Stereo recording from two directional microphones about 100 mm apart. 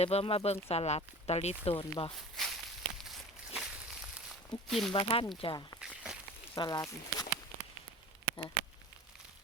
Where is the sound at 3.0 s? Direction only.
Centre (ahead or behind).